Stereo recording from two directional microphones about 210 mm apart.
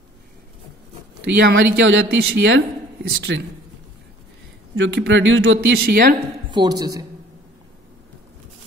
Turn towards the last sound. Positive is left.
turn(degrees=-15)  # may be behind; listen again after turning